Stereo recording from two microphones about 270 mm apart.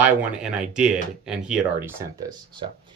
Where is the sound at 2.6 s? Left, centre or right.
Right.